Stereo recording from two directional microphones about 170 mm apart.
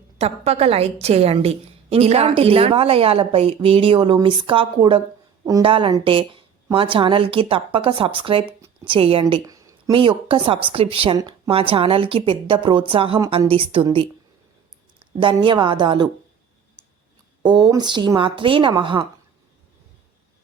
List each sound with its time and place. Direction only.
0.2 s a woman's voice: 35° right (ahead or behind)
8.4 s a sound: 10° right (ahead or behind)
8.9 s a woman's voice: 35° right (ahead or behind)
9.4 s a sound: 20° right (ahead or behind)
10.0 s a woman's voice: 30° right (ahead or behind)
17.4 s a woman's voice: 25° right (ahead or behind)